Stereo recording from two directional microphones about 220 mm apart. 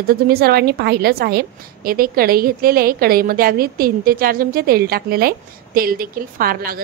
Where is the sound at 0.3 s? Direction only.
45° right (ahead or behind).